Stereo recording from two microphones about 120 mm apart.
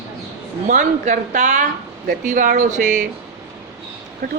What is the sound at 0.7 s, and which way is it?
A woman's voice, 90° right.